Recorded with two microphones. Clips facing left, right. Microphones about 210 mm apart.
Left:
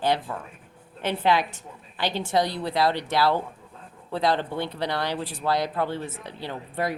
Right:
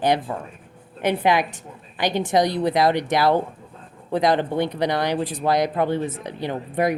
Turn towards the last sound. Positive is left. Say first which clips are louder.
# right 7 dB
turn(degrees=-15)  # may be behind; listen again after turning